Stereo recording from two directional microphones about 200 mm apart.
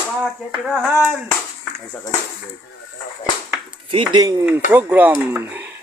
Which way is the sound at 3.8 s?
25° right (ahead or behind).